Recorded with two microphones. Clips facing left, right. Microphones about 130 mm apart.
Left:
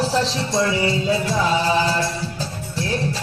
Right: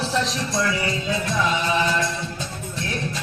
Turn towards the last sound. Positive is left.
turn(degrees=35)  # may be behind; listen again after turning